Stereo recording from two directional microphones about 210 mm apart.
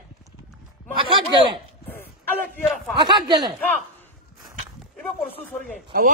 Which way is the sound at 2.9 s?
20° right (ahead or behind).